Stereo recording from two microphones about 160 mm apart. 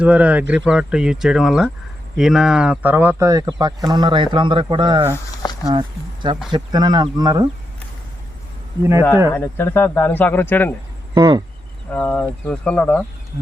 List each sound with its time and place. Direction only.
0.0 s speech: 10° right (ahead or behind); by 5.0 s 30° right (ahead or behind)
6.5 s speech: 25° right (ahead or behind)
8.8 s speech: 15° right (ahead or behind)
9.3 s a man's voice: 15° left (ahead or behind)
11.1 s speech: 30° right (ahead or behind)
11.9 s a man's voice: 10° left (ahead or behind)